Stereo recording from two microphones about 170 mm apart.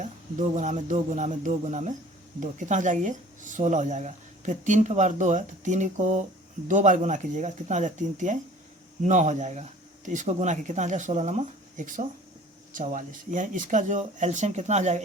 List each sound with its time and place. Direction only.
0.0 s speech: 45° right (ahead or behind)